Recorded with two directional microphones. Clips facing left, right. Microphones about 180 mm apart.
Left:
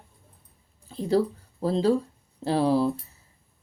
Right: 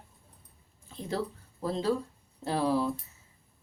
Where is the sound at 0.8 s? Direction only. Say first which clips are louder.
Left 10 dB; 30° left (ahead or behind).